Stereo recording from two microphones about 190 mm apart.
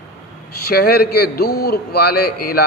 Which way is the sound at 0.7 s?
55° left (ahead or behind).